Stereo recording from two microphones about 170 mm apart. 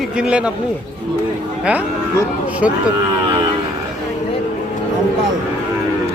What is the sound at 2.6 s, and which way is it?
Speech, 5° right (ahead or behind).